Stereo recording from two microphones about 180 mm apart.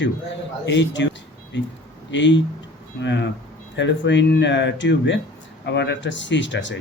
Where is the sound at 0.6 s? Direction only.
85° left.